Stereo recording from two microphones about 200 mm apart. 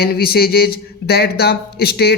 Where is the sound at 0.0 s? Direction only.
50° left (ahead or behind).